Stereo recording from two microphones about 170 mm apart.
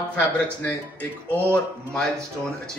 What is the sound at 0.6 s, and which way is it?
A man's voice, 10° left (ahead or behind).